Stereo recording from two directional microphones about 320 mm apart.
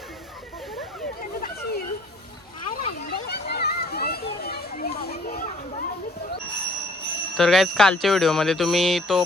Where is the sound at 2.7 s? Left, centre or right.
Left.